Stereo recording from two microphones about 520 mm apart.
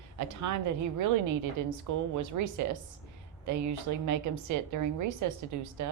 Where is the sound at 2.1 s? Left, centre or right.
Right.